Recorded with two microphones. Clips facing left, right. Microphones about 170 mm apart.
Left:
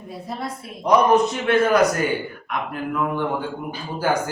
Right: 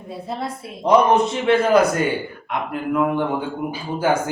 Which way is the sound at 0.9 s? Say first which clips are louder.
Right 1 dB; 25° right (ahead or behind).